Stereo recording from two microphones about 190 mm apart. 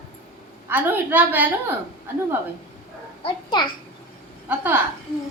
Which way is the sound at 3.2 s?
25° left (ahead or behind).